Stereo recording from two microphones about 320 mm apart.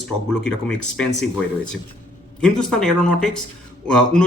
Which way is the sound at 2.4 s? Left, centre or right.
Centre.